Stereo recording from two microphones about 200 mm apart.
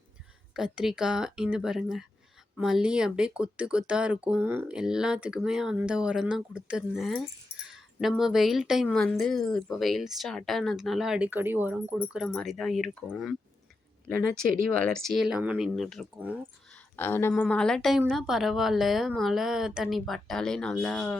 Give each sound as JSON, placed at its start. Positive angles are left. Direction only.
{"t": 0.5, "sound": "speech", "side_deg": 0}
{"t": 14.4, "sound": "speech", "side_deg": -45}
{"t": 14.7, "sound": "speech", "side_deg": 5}
{"t": 16.7, "sound": "a sound", "side_deg": 10}
{"t": 17.4, "sound": "speech", "side_deg": 5}